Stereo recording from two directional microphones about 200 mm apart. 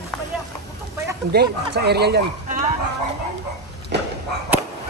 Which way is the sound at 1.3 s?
55° right (ahead or behind).